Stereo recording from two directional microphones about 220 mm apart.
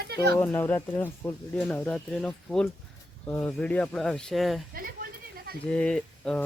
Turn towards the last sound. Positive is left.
turn(degrees=5)  # may be behind; listen again after turning